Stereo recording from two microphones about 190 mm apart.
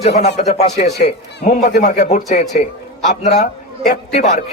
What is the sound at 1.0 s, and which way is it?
Speech, 60° left (ahead or behind).